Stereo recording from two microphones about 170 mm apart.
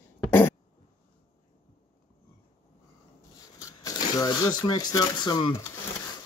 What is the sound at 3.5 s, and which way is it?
Speech, 20° left (ahead or behind).